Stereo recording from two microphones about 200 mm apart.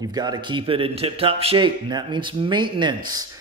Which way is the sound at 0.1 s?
20° right (ahead or behind).